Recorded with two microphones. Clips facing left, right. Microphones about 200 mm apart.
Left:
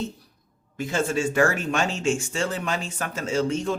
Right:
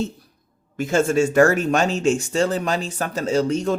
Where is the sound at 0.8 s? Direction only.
45° right (ahead or behind).